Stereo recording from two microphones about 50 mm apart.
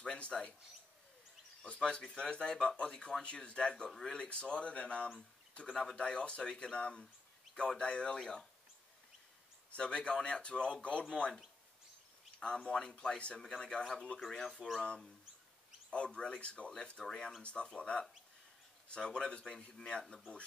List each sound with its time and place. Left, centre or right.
0.0 s speech: centre
1.6 s speech: centre
9.8 s speech: left
12.4 s speech: centre
14.6 s speech: centre
15.9 s speech: left
17.0 s speech: centre